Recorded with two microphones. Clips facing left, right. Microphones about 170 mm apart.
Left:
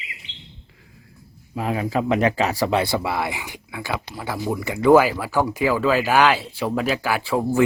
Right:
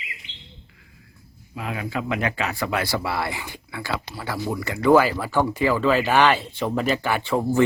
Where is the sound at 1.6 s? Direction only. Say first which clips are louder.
Left 6 dB; 35° left (ahead or behind).